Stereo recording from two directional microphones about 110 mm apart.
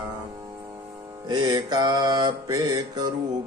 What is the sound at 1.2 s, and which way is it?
Mantra, 40° right (ahead or behind).